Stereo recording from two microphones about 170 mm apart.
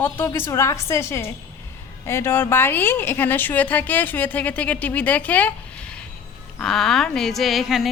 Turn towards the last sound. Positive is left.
turn(degrees=0)  # may be behind; listen again after turning